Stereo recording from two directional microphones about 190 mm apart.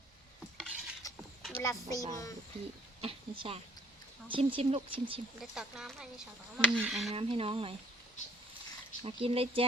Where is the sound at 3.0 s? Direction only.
30° right (ahead or behind).